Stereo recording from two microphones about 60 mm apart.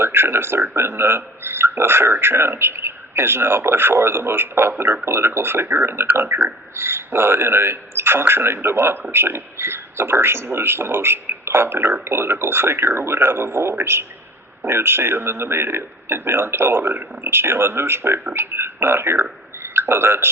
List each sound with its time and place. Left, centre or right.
0.0 s a man's voice: right